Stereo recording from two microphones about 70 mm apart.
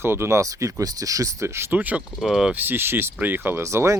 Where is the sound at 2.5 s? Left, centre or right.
Right.